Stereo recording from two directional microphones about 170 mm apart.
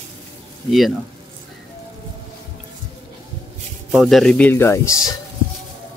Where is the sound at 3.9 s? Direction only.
Centre (ahead or behind); by 5.2 s 20° left (ahead or behind).